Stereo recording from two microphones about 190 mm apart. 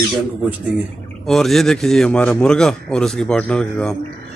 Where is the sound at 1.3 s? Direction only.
Centre (ahead or behind).